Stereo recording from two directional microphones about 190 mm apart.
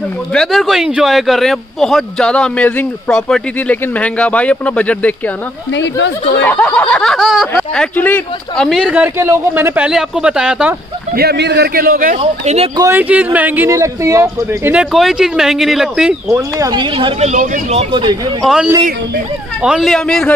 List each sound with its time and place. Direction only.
0.3 s speech: centre (ahead or behind)
5.8 s speech: 70° left (ahead or behind)
6.4 s speech: 5° left (ahead or behind)
11.1 s a man's voice: 60° right (ahead or behind)
12.2 s speech: 35° right (ahead or behind)
12.7 s speech: 15° right (ahead or behind)
16.3 s speech: 15° right (ahead or behind)
18.4 s speech: 5° right (ahead or behind)